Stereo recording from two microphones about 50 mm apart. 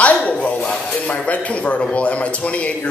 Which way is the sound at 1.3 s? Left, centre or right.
Left.